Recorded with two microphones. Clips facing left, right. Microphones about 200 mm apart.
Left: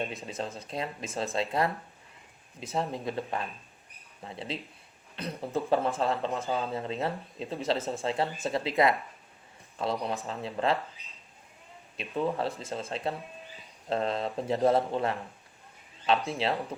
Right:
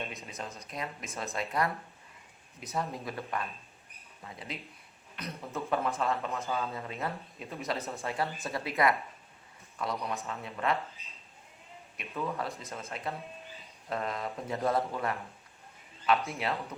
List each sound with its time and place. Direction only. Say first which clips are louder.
0.3 s speech: left 6 dB; 30° left (ahead or behind)
11.9 s speech: left 5 dB; 30° left (ahead or behind)